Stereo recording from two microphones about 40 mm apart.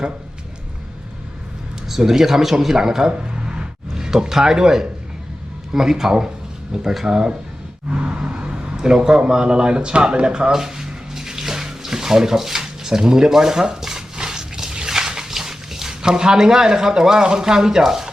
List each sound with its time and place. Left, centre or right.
1.9 s speech: centre
7.9 s a sound: right
13.8 s dog: centre